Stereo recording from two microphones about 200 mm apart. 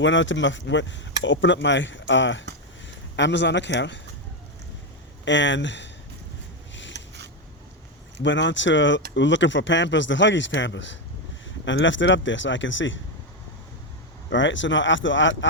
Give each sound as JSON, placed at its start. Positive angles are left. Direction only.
{"t": 0.0, "sound": "speech", "side_deg": 70}
{"t": 5.2, "sound": "speech", "side_deg": 65}
{"t": 8.2, "sound": "speech", "side_deg": 65}
{"t": 14.3, "sound": "speech", "side_deg": 70}